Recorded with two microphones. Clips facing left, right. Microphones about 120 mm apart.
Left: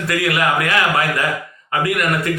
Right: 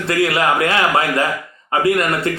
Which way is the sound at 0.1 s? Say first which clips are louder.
Right 2 dB; 30° right (ahead or behind).